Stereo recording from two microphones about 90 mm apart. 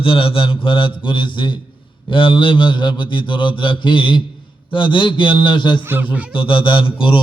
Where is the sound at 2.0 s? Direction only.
65° left (ahead or behind).